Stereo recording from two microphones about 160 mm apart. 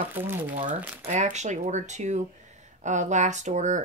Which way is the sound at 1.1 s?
50° right (ahead or behind).